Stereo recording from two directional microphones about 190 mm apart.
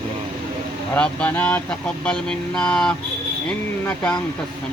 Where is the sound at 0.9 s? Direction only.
5° left (ahead or behind).